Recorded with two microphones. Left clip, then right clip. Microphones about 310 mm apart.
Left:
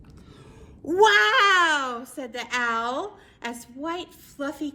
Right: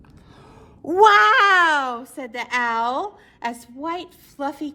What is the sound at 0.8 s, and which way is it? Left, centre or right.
A woman's voice, centre.